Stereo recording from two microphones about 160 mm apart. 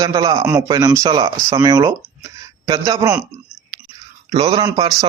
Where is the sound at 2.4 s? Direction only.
25° right (ahead or behind).